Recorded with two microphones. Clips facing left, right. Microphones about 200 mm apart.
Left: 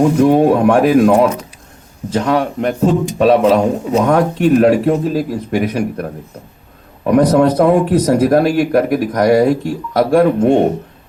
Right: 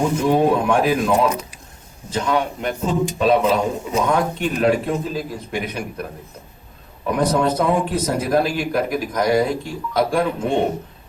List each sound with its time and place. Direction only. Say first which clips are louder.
0.2 s speech: left 5 dB; 60° left (ahead or behind)
7.1 s speech: left 8 dB; 60° left (ahead or behind)